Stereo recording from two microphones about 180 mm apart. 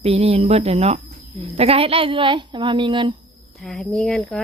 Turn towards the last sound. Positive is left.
turn(degrees=5)  # may be behind; listen again after turning